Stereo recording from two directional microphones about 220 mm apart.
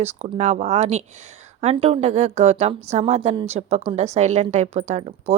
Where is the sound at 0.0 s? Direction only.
30° right (ahead or behind).